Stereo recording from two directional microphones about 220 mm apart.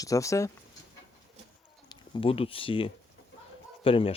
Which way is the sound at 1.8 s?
20° left (ahead or behind).